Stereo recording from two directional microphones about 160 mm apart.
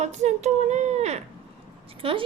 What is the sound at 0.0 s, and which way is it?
A woman's voice, 45° right (ahead or behind).